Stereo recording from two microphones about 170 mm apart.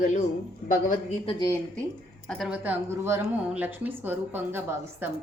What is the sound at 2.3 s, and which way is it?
Speech, 5° right (ahead or behind).